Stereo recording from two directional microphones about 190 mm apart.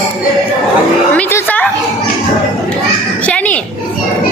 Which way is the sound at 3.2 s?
5° left (ahead or behind).